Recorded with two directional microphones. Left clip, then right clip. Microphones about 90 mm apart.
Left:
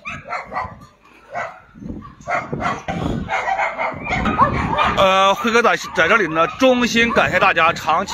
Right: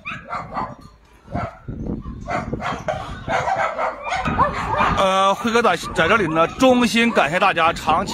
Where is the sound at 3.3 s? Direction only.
25° right (ahead or behind).